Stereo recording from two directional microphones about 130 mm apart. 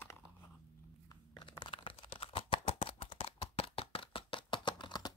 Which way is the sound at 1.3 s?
40° left (ahead or behind).